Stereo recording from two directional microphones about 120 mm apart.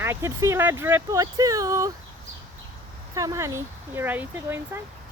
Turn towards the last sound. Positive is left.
turn(degrees=-20)  # may be behind; listen again after turning